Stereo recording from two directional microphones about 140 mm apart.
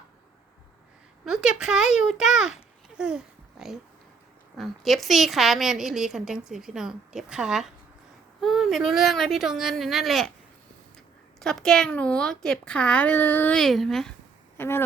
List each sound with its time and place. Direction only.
1.2 s a woman's voice: 5° right (ahead or behind)
11.3 s a woman's voice: 5° left (ahead or behind)
13.6 s a woman's voice: centre (ahead or behind)
14.6 s a woman's voice: 15° left (ahead or behind)